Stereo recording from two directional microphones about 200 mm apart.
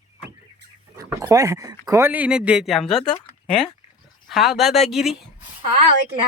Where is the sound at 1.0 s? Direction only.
15° right (ahead or behind).